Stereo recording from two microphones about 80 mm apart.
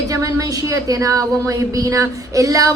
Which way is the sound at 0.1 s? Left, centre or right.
Right.